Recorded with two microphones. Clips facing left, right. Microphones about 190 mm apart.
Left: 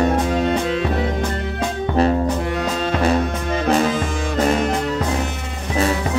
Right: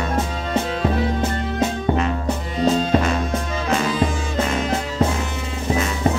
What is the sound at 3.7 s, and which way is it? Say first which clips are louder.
Music: left 1 dB; 40° left (ahead or behind).